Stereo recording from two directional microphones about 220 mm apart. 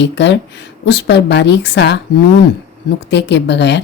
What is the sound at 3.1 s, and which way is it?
Speech, 50° left (ahead or behind).